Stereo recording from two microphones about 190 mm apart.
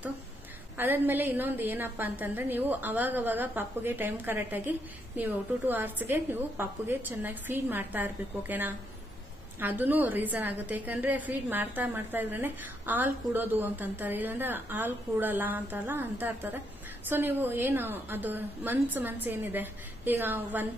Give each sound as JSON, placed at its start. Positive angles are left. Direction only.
{"t": 0.7, "sound": "a woman's voice", "side_deg": -10}